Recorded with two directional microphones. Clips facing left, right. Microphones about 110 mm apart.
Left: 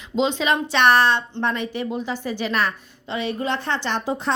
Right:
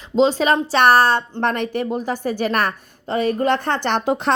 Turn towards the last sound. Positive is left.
turn(degrees=-65)  # may be behind; listen again after turning